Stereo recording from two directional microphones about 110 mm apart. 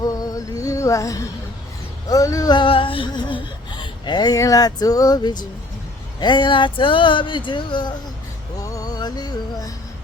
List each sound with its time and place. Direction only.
0.0 s music: 35° left (ahead or behind)
2.0 s speech: 30° left (ahead or behind)
2.6 s a sound: 55° left (ahead or behind)
4.4 s speech: 30° left (ahead or behind)
8.5 s music: 30° left (ahead or behind)